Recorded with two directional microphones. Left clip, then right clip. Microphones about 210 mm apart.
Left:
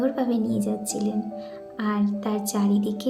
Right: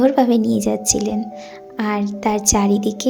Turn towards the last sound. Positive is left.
turn(degrees=-35)  # may be behind; listen again after turning